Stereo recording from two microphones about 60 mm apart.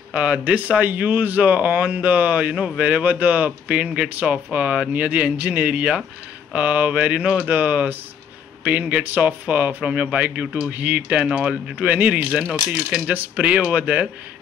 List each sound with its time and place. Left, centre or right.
0.1 s a man's voice: centre